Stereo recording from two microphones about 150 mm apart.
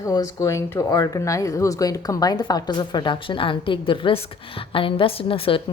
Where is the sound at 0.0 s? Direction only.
25° left (ahead or behind).